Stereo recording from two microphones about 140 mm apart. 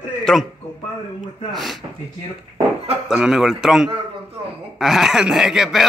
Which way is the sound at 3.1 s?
5° right (ahead or behind).